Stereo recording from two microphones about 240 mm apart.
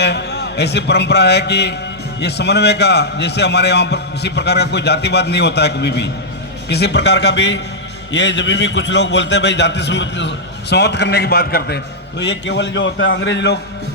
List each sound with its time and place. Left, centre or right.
0.0 s a man's voice: left